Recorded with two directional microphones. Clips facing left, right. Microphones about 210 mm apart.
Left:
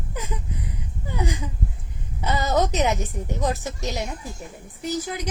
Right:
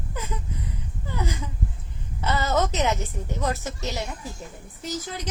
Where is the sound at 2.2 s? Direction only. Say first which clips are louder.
Left 2 dB; 15° left (ahead or behind).